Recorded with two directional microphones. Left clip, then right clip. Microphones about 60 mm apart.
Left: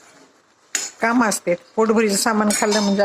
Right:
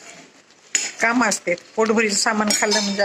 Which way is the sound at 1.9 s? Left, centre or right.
Left.